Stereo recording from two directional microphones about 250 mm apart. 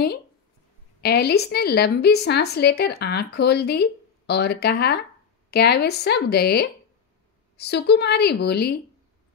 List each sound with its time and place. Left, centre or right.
1.0 s a woman's voice: left